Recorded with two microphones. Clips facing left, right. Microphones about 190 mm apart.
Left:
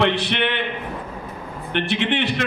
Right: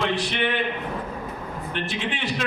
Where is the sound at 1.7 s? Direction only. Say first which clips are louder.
Left 9 dB; 70° left (ahead or behind).